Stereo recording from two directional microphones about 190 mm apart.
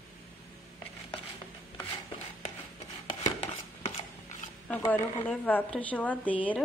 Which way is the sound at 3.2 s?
35° left (ahead or behind).